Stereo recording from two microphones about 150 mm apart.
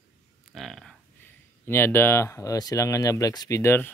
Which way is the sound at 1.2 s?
15° left (ahead or behind).